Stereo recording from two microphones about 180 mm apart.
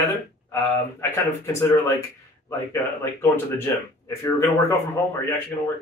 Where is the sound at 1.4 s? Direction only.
15° left (ahead or behind).